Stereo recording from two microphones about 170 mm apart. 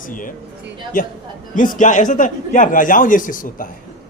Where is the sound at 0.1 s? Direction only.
50° left (ahead or behind).